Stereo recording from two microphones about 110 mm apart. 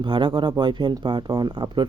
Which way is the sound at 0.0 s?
45° right (ahead or behind).